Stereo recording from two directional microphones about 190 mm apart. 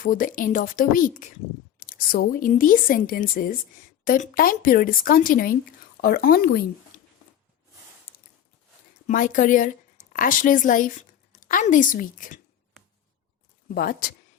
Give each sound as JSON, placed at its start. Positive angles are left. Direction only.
{"t": 0.0, "sound": "speech", "side_deg": 45}
{"t": 9.0, "sound": "a woman's voice", "side_deg": 40}
{"t": 13.7, "sound": "speech", "side_deg": 50}